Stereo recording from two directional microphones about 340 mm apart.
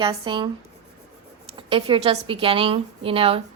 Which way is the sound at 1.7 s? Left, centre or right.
Centre.